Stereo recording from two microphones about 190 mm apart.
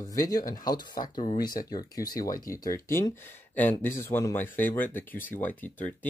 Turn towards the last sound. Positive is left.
turn(degrees=10)  # may be behind; listen again after turning